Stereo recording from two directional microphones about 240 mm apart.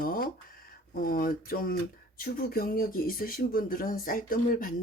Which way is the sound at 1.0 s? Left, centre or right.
Left.